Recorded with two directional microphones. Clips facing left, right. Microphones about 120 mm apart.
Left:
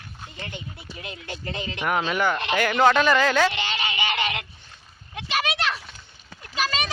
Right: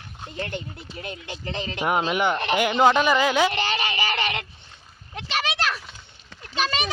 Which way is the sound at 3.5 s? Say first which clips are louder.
Right 3 dB; 40° right (ahead or behind).